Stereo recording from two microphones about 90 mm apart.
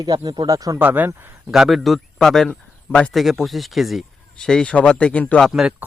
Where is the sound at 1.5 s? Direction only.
5° right (ahead or behind); by 3.1 s 15° left (ahead or behind).